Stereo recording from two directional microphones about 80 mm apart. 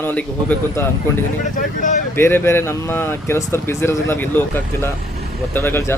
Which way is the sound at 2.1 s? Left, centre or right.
Left.